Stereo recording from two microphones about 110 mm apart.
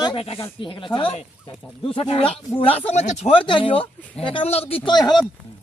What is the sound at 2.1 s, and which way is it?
Speech, 60° left (ahead or behind).